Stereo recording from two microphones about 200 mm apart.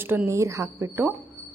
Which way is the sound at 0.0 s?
10° right (ahead or behind).